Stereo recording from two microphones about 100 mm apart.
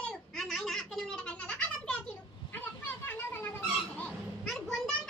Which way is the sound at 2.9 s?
20° left (ahead or behind).